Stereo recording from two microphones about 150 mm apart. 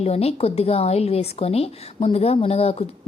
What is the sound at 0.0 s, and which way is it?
A woman's voice, 45° left (ahead or behind).